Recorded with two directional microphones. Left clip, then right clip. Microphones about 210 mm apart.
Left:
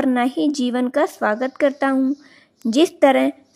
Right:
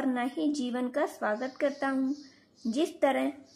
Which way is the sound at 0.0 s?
40° left (ahead or behind).